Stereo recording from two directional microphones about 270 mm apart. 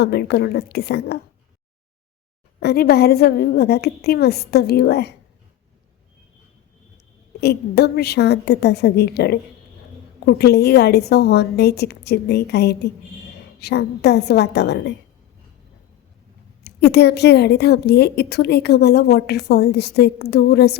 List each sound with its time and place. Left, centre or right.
0.0 s a woman's voice: left
2.6 s a woman's voice: left
7.4 s a woman's voice: left
16.6 s a woman's voice: left